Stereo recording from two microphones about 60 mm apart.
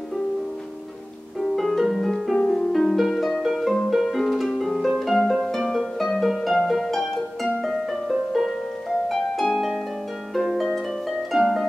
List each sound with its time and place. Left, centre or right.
1.4 s music: centre
2.4 s harp: centre
2.7 s harp: centre